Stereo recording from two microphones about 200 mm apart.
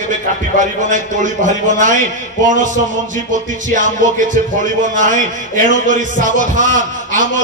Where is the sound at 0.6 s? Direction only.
40° right (ahead or behind).